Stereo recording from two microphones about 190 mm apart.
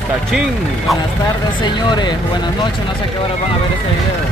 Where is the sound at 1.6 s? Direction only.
25° left (ahead or behind).